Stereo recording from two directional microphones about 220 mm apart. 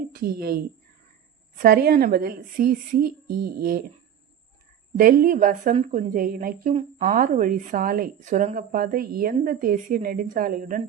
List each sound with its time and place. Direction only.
0.1 s a woman's voice: 45° right (ahead or behind)
4.9 s a woman's voice: 40° right (ahead or behind)